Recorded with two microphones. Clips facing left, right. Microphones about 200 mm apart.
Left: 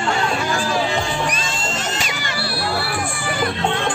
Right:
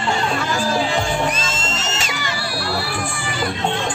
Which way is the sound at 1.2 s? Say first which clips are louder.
Right 1 dB; 20° right (ahead or behind).